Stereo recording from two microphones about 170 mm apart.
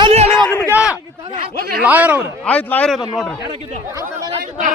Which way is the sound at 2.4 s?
10° left (ahead or behind).